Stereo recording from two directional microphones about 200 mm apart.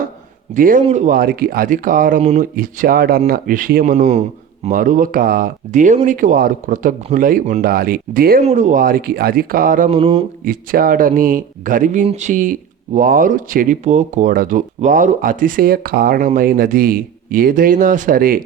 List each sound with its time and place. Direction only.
0.5 s speech: 40° right (ahead or behind)
3.9 s a man's voice: 35° right (ahead or behind)
8.4 s speech: 35° right (ahead or behind)
10.4 s speech: 45° right (ahead or behind)